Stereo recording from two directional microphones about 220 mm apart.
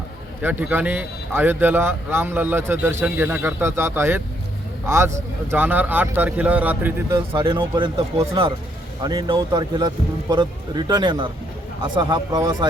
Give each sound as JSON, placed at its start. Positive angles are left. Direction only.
{"t": 0.4, "sound": "a man's voice", "side_deg": -10}
{"t": 7.3, "sound": "speech", "side_deg": -20}